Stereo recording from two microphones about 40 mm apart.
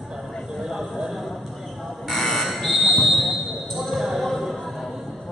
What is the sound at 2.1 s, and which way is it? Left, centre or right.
Fire alarm, centre.